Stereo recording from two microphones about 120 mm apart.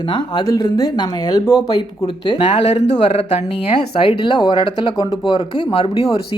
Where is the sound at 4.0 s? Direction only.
45° left (ahead or behind).